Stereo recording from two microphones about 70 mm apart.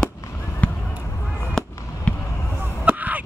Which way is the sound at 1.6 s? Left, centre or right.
Centre.